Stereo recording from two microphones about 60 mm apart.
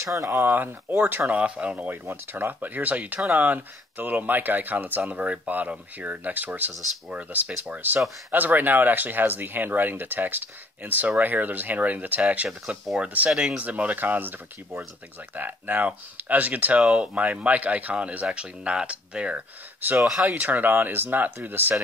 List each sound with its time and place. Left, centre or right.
0.0 s speech: right
0.3 s speech: right
1.3 s speech: centre
1.9 s speech: right
12.4 s speech: centre
13.6 s speech: right
16.8 s speech: centre
20.0 s speech: centre
20.2 s speech: right